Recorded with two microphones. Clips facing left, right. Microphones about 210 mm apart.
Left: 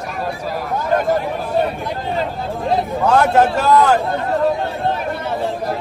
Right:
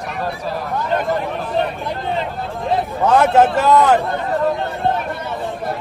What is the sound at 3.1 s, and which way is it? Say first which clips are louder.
Speech: right 1 dB; 5° right (ahead or behind).